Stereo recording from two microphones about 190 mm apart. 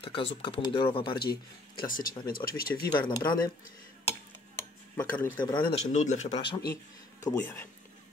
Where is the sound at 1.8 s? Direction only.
45° left (ahead or behind).